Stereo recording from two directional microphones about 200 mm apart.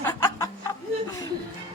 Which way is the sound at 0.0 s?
10° left (ahead or behind).